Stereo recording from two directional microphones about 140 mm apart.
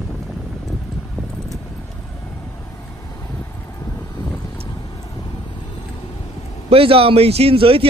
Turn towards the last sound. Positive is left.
turn(degrees=-40)  # may be behind; listen again after turning